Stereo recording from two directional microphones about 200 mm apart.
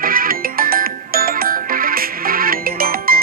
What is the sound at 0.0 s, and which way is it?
Music, 45° right (ahead or behind).